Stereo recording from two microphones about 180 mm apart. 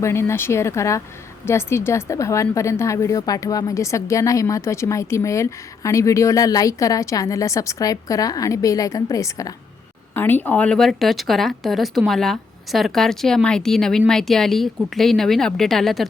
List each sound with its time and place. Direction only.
0.0 s a woman's voice: 15° left (ahead or behind)